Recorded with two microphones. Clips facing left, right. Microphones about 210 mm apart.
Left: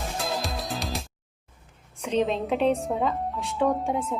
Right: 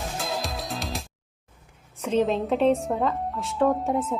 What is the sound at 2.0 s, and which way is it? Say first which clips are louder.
A woman's voice: right 2 dB; centre (ahead or behind).